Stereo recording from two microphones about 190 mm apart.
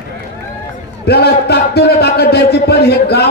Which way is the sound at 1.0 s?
60° left (ahead or behind).